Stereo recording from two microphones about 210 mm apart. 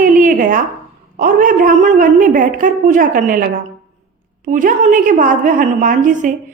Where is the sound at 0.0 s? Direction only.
40° right (ahead or behind).